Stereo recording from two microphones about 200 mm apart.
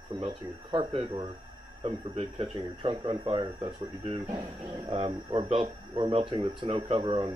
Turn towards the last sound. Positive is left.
turn(degrees=-25)  # may be behind; listen again after turning